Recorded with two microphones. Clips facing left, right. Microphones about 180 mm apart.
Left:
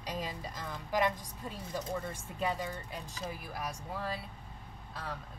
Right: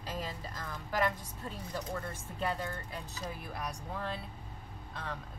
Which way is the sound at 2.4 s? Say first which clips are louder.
Left 1 dB; 10° left (ahead or behind).